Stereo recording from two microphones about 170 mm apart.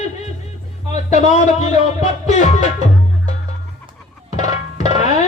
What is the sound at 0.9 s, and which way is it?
Speech, 40° left (ahead or behind).